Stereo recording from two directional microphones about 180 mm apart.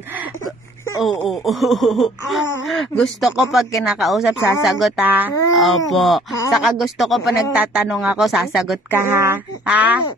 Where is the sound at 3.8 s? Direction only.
Centre (ahead or behind).